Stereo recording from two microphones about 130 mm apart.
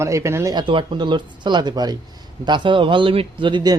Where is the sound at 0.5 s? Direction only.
40° right (ahead or behind).